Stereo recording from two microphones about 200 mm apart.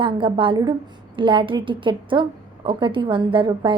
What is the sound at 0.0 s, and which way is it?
A woman's voice, 25° right (ahead or behind).